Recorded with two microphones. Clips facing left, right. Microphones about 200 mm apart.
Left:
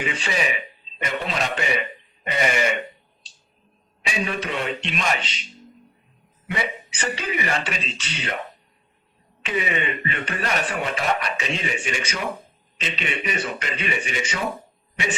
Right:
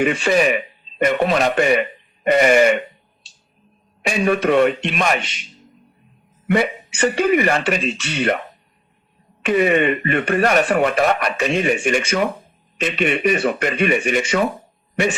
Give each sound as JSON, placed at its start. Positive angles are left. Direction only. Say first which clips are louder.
{"t": 0.0, "sound": "speech", "louder": "right 10 dB", "side_deg": -55}
{"t": 4.0, "sound": "speech", "louder": "right 10 dB", "side_deg": -55}
{"t": 6.5, "sound": "speech", "louder": "right 10 dB", "side_deg": -55}
{"t": 9.4, "sound": "speech", "louder": "right 10 dB", "side_deg": -55}